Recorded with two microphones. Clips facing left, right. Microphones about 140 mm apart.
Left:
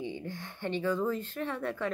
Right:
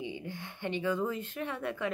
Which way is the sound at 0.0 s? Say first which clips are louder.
Left 2 dB; 15° right (ahead or behind).